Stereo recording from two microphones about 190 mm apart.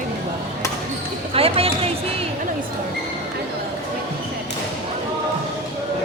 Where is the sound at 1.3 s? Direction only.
30° right (ahead or behind).